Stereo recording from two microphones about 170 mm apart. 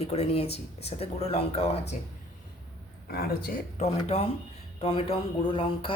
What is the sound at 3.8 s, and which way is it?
Speech, 35° left (ahead or behind).